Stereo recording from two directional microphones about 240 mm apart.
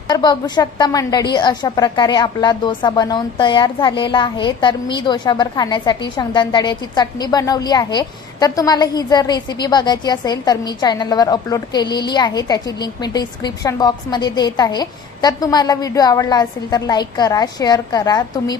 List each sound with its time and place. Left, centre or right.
0.1 s a woman's voice: centre